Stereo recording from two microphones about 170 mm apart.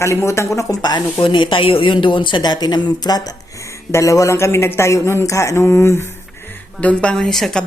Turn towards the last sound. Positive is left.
turn(degrees=5)  # may be behind; listen again after turning